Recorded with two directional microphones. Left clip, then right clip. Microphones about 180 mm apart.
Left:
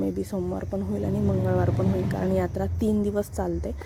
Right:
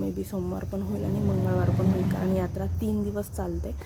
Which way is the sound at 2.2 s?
30° left (ahead or behind).